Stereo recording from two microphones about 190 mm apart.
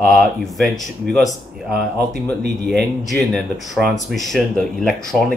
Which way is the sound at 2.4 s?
60° right (ahead or behind).